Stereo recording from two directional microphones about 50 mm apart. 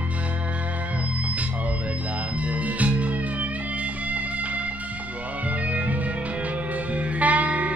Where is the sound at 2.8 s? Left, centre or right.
Right.